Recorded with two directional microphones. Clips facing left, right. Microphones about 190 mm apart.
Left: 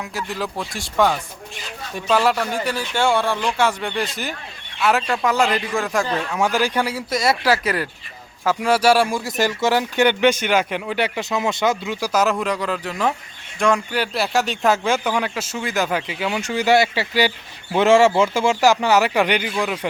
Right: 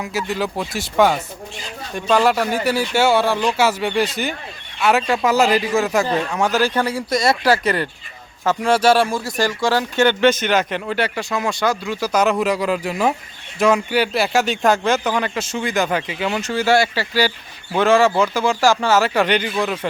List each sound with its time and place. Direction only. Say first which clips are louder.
0.0 s speech: right 4 dB; centre (ahead or behind)
6.4 s speech: right 1 dB; 15° left (ahead or behind)
9.4 s speech: even; 20° left (ahead or behind)